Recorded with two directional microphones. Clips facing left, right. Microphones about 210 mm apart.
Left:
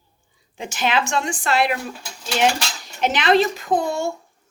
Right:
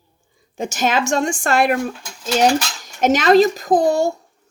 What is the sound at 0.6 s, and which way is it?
A woman's voice, 45° right (ahead or behind).